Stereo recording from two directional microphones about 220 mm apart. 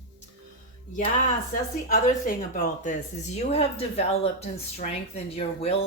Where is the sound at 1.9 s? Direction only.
35° left (ahead or behind).